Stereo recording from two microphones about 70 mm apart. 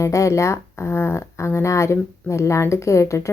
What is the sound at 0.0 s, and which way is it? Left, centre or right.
A woman's voice, left.